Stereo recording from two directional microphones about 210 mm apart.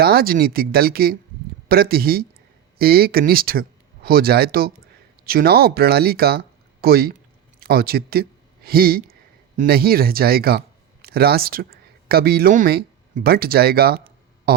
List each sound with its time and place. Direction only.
0.0 s speech: 45° right (ahead or behind)